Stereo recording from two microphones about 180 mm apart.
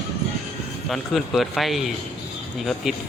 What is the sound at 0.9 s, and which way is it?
A man's voice, centre (ahead or behind).